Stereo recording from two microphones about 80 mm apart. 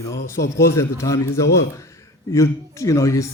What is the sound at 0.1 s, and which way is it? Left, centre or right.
Speech, left.